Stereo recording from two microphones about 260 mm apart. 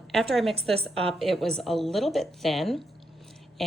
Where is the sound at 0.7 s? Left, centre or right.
Right.